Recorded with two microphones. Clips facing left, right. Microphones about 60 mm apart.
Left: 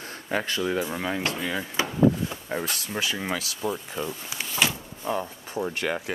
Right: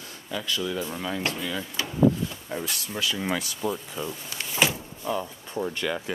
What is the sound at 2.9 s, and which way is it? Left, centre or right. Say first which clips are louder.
Speech: right 2 dB; left.